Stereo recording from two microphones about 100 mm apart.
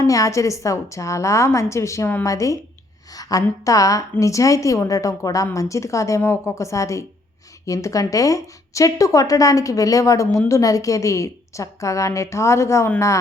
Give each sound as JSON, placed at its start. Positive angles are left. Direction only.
{"t": 0.0, "sound": "a woman's voice", "side_deg": 35}